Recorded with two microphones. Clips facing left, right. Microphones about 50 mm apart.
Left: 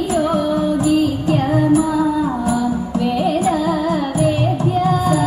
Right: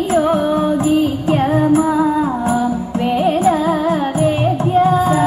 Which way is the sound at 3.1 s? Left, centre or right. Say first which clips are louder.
Right 4 dB; right.